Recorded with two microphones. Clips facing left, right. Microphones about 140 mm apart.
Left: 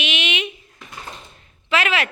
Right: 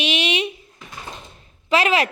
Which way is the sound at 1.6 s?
35° right (ahead or behind).